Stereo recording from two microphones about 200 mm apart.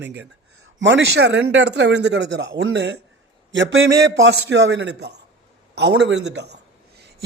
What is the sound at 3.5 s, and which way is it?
Speech, 75° right (ahead or behind).